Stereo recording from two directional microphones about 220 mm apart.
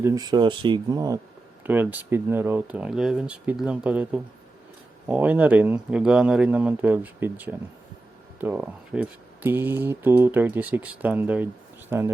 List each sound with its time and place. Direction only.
0.0 s speech: 15° right (ahead or behind)